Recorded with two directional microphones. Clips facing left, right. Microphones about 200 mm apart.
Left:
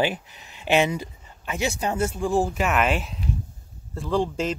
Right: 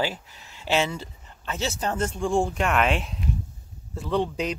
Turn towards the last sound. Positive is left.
turn(degrees=0)  # may be behind; listen again after turning